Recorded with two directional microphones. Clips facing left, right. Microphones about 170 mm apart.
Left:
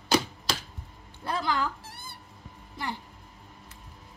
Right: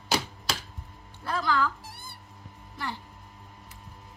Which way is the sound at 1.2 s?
20° left (ahead or behind).